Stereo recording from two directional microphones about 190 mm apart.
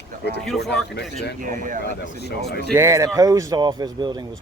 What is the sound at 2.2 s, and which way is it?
Speech, 60° left (ahead or behind).